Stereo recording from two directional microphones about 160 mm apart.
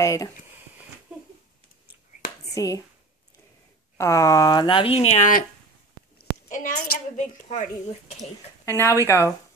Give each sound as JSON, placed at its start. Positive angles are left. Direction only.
{"t": 0.0, "sound": "a sound", "side_deg": 20}
{"t": 2.5, "sound": "speech", "side_deg": 20}
{"t": 4.0, "sound": "speech", "side_deg": 20}
{"t": 6.5, "sound": "a woman's voice", "side_deg": 60}
{"t": 8.6, "sound": "speech", "side_deg": 15}